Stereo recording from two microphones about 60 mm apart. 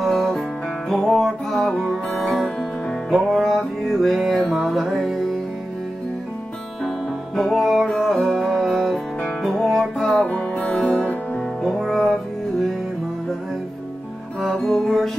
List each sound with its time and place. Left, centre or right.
0.0 s music: centre
3.1 s music: centre
7.3 s music: centre
10.2 s music: centre
11.6 s music: centre
14.4 s music: centre